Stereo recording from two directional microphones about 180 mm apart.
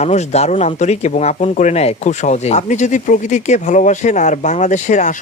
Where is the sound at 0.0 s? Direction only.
40° left (ahead or behind).